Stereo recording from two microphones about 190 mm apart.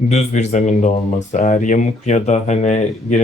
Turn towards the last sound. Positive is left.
turn(degrees=40)  # may be behind; listen again after turning